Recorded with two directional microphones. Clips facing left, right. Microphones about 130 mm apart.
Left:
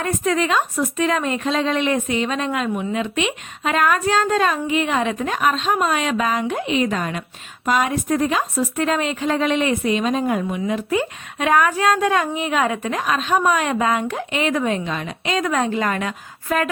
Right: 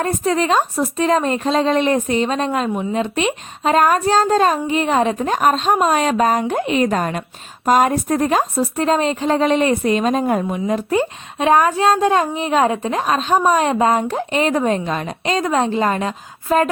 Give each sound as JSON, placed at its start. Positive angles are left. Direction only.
{"t": 0.0, "sound": "speech", "side_deg": -30}